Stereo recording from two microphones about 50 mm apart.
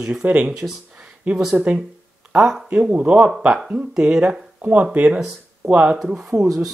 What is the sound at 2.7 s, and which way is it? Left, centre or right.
Speech, right.